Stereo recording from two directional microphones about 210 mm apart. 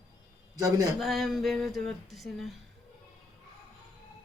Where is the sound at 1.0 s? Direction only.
Centre (ahead or behind).